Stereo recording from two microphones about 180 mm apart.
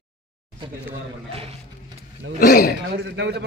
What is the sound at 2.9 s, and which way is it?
Speech, 70° right (ahead or behind).